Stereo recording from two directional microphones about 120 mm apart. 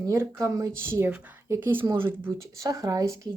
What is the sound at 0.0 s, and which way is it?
Speech, 25° right (ahead or behind).